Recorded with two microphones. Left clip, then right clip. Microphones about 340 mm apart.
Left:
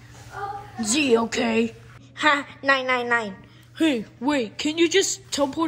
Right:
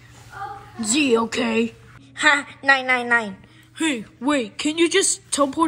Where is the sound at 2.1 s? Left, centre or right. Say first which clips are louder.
Right 3 dB; centre.